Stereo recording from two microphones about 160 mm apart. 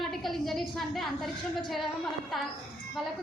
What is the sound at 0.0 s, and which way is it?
A woman's voice, centre (ahead or behind).